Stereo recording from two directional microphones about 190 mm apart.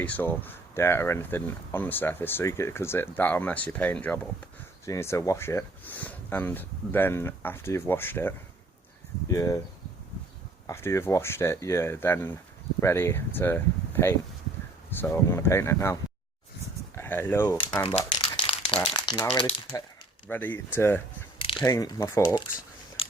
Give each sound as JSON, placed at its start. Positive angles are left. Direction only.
{"t": 0.0, "sound": "speech", "side_deg": 10}
{"t": 9.3, "sound": "speech", "side_deg": 15}
{"t": 10.7, "sound": "speech", "side_deg": 15}
{"t": 17.8, "sound": "crumpling", "side_deg": 25}
{"t": 18.9, "sound": "speech", "side_deg": 20}
{"t": 20.2, "sound": "speech", "side_deg": 10}
{"t": 21.3, "sound": "mechanisms", "side_deg": 30}
{"t": 21.6, "sound": "speech", "side_deg": 20}